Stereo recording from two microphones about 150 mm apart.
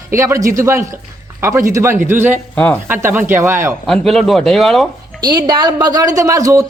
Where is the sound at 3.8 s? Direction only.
Centre (ahead or behind).